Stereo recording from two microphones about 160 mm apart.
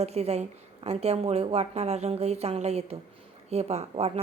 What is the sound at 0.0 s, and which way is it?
A woman's voice, 40° right (ahead or behind).